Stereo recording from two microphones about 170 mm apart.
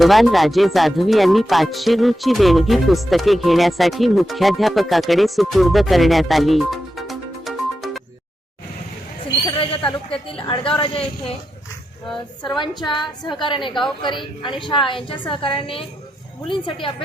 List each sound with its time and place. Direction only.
0.0 s speech: centre (ahead or behind)
9.6 s a sound: 30° left (ahead or behind)
12.5 s a woman's voice: 30° left (ahead or behind)